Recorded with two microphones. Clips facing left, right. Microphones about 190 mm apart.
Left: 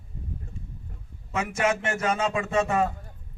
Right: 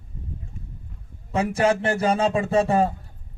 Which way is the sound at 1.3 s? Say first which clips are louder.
Right 5 dB; 35° right (ahead or behind).